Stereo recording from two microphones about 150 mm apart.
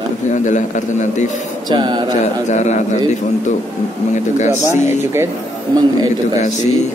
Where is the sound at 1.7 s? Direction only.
30° right (ahead or behind).